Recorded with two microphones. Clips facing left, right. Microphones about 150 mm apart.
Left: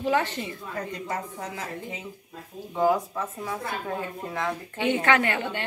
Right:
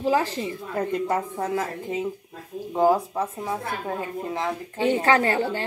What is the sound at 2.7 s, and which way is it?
Speech, 30° right (ahead or behind).